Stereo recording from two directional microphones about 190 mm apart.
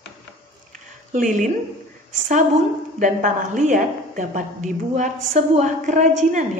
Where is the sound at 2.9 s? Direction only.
40° right (ahead or behind).